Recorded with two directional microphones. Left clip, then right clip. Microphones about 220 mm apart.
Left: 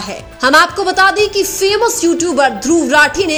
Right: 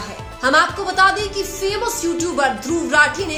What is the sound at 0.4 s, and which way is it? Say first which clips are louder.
A woman's voice: left 6 dB; 35° left (ahead or behind).